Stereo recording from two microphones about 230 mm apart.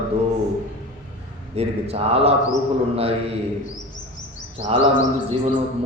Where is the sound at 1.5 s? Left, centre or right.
Right.